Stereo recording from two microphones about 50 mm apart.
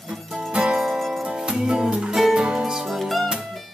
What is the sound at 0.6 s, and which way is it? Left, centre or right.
Music, centre.